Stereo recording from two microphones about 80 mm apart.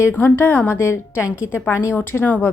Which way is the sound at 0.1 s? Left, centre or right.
Left.